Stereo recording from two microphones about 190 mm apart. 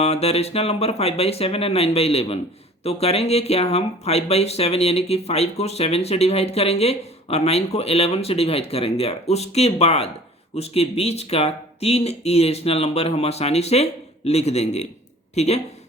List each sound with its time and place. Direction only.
0.0 s speech: 35° left (ahead or behind)